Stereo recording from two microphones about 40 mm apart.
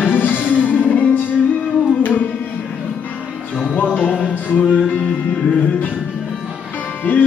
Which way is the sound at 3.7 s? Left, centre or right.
Left.